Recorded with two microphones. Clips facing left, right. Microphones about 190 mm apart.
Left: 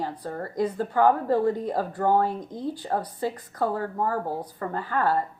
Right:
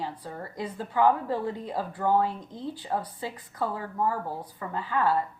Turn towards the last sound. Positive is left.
turn(degrees=45)  # may be behind; listen again after turning